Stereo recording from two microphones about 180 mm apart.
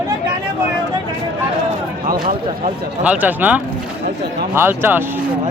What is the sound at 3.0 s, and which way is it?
Speech, 10° right (ahead or behind).